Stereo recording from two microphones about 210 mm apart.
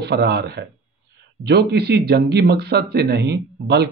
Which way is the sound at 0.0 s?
50° right (ahead or behind).